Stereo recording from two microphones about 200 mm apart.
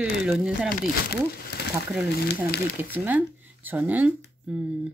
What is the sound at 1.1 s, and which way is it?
Speech, 55° left (ahead or behind).